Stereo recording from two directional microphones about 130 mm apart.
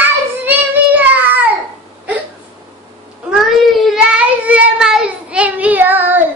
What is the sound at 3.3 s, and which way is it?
Child singing, centre (ahead or behind).